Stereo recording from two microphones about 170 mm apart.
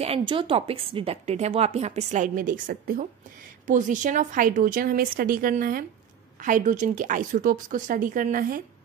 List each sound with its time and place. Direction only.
0.0 s a woman's voice: 30° right (ahead or behind); by 8.6 s 55° right (ahead or behind)